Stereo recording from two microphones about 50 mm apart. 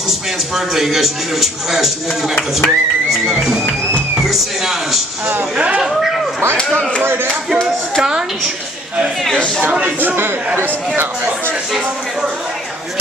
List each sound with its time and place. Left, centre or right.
0.7 s speech: centre
9.6 s speech: right
9.8 s a man's voice: right